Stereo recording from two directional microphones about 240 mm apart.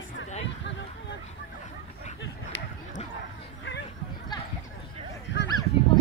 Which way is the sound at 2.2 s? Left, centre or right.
Left.